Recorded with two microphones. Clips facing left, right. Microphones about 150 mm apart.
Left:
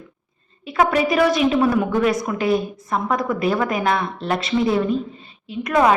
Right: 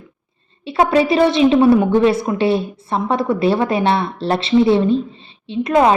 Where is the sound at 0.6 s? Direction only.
30° right (ahead or behind).